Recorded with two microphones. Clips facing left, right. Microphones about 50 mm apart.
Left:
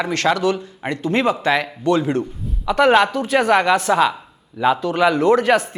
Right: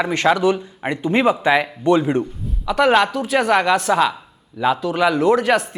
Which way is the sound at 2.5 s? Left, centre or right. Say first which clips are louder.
Left 2 dB; centre.